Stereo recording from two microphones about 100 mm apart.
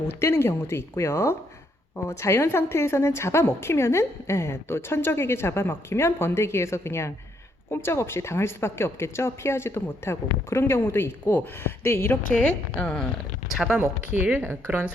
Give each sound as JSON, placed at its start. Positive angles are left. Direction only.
{"t": 0.1, "sound": "a woman's voice", "side_deg": 25}
{"t": 12.8, "sound": "speech", "side_deg": 10}
{"t": 13.5, "sound": "speech", "side_deg": -5}
{"t": 14.1, "sound": "speech", "side_deg": -15}